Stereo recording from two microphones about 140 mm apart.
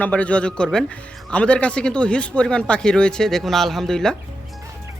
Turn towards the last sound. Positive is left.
turn(degrees=5)  # may be behind; listen again after turning